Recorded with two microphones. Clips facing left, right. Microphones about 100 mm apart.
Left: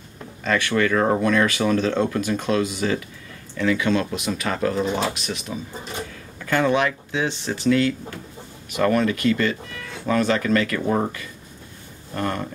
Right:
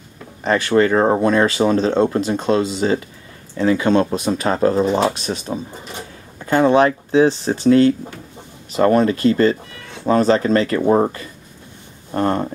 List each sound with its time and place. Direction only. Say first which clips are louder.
0.4 s speech: right 6 dB; 30° right (ahead or behind)